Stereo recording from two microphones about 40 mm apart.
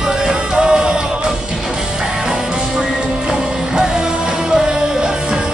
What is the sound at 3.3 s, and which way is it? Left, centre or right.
Music, centre.